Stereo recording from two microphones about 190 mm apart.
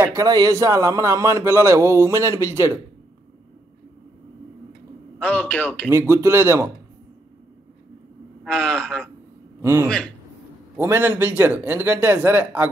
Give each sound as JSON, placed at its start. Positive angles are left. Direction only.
{"t": 0.0, "sound": "a man's voice", "side_deg": -15}
{"t": 5.2, "sound": "a man's voice", "side_deg": 5}
{"t": 5.9, "sound": "a man's voice", "side_deg": -15}
{"t": 8.5, "sound": "speech", "side_deg": 5}
{"t": 9.6, "sound": "a man's voice", "side_deg": -15}
{"t": 9.8, "sound": "speech", "side_deg": 5}
{"t": 10.8, "sound": "a man's voice", "side_deg": -10}